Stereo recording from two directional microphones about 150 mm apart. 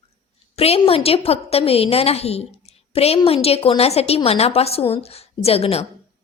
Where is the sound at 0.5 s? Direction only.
40° left (ahead or behind).